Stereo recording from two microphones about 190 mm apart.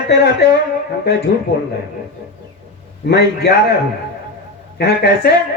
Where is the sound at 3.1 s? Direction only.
60° left (ahead or behind).